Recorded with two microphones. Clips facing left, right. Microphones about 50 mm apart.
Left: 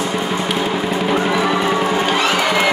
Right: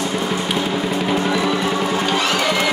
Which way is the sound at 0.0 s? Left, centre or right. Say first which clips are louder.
Left 2 dB; centre.